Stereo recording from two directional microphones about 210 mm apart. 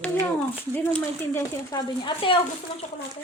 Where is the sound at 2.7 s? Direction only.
25° left (ahead or behind).